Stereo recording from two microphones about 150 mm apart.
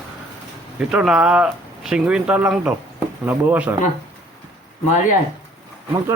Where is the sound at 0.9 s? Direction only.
5° right (ahead or behind).